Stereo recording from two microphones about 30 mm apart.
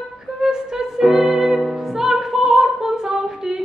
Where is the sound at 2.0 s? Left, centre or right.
Centre.